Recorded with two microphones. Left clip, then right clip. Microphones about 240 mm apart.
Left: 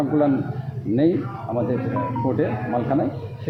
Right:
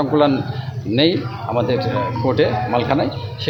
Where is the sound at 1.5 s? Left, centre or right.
Right.